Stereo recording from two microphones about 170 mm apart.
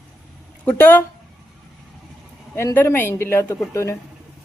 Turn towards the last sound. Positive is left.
turn(degrees=15)  # may be behind; listen again after turning